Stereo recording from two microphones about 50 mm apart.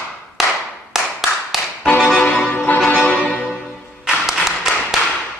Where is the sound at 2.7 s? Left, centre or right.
Left.